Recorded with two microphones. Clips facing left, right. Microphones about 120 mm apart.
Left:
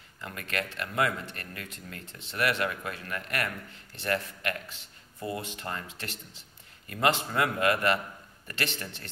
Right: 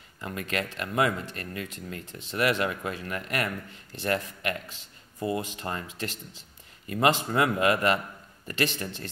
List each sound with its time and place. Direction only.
0.2 s speech: 25° right (ahead or behind)
6.9 s speech: 20° right (ahead or behind)